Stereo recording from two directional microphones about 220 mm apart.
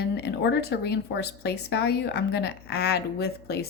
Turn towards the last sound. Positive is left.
turn(degrees=45)  # may be behind; listen again after turning